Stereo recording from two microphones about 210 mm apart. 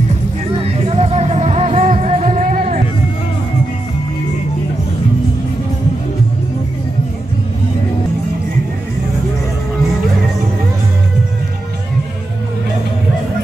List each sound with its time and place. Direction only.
0.5 s music: 30° right (ahead or behind)